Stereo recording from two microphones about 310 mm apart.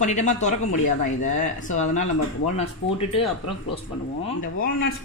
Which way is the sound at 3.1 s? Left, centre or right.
Centre.